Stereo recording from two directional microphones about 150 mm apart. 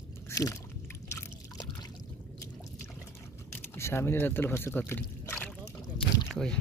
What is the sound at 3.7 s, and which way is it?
Speech, 15° left (ahead or behind).